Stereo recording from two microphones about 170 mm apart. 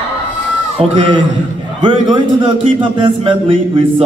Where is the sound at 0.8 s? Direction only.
30° right (ahead or behind).